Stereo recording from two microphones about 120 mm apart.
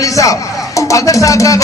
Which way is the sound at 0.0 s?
25° left (ahead or behind).